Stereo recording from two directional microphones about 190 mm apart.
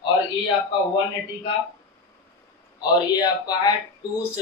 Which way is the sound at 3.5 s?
20° left (ahead or behind).